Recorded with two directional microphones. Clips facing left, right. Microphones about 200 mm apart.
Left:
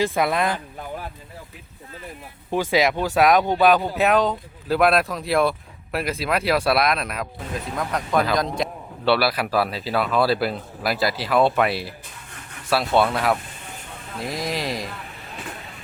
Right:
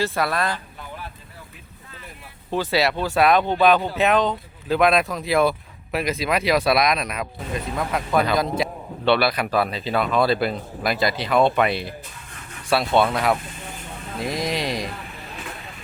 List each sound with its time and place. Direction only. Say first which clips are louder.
0.0 s speech: left 2 dB; 15° left (ahead or behind)
2.5 s speech: left 1 dB; 15° left (ahead or behind)